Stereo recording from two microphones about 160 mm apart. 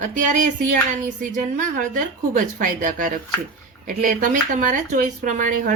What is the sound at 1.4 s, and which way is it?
Speech, 55° right (ahead or behind).